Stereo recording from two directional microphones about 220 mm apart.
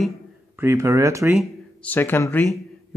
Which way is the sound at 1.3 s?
5° left (ahead or behind).